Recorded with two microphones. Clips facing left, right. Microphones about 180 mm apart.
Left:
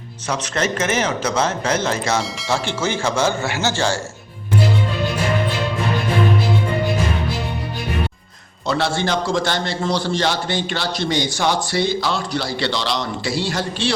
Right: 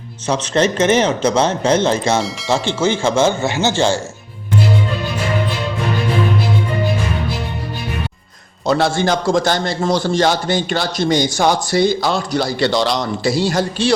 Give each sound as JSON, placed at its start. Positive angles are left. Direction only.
{"t": 0.4, "sound": "speech", "side_deg": -30}
{"t": 8.6, "sound": "a man's voice", "side_deg": -45}